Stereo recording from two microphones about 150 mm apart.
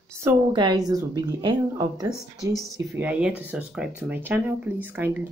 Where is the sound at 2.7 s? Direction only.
10° right (ahead or behind).